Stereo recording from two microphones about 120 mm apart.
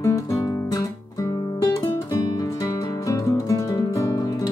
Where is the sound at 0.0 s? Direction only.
25° left (ahead or behind).